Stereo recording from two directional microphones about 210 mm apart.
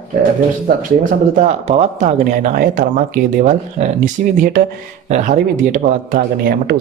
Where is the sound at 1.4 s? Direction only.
35° right (ahead or behind).